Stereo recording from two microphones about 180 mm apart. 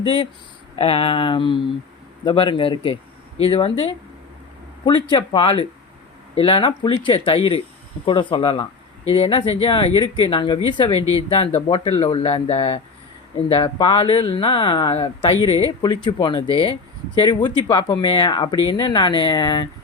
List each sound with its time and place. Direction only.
0.8 s speech: 30° left (ahead or behind)